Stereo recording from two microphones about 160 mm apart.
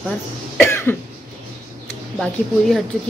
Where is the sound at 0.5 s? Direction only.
15° left (ahead or behind).